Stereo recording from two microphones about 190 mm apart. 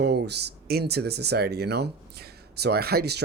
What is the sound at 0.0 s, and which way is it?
Speech, 60° right (ahead or behind).